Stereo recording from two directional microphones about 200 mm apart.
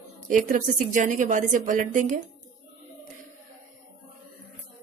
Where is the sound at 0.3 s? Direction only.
40° right (ahead or behind).